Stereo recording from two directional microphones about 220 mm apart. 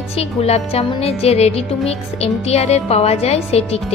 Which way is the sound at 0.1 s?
30° left (ahead or behind).